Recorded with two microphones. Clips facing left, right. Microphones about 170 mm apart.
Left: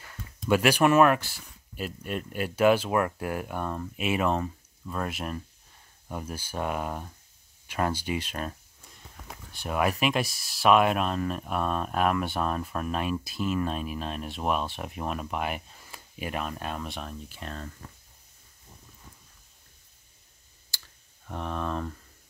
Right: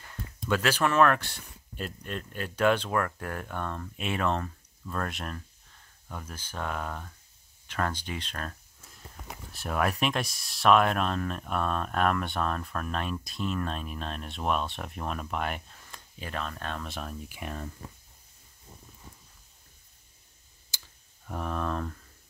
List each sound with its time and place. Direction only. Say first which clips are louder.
0.5 s speech: left 5 dB; 15° left (ahead or behind)
8.8 s speech: right 1 dB; centre (ahead or behind)
17.3 s speech: right 1 dB; 10° right (ahead or behind)
20.7 s clicking: left 1 dB; 20° right (ahead or behind)
21.3 s speech: even; centre (ahead or behind)